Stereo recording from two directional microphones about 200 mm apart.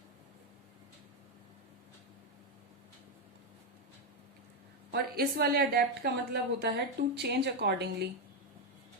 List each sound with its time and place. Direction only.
4.9 s a woman's voice: 50° right (ahead or behind)